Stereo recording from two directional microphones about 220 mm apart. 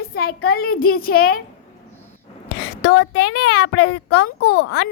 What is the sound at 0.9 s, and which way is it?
Speech, 40° left (ahead or behind).